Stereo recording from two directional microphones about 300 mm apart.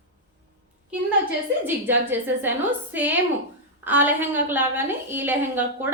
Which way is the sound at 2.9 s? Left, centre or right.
Centre.